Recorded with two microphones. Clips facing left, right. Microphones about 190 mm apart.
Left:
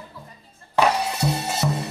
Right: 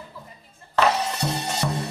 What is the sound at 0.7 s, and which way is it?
Music, 10° left (ahead or behind).